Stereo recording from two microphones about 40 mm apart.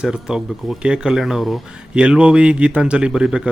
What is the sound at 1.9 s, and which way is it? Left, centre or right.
A man's voice, right.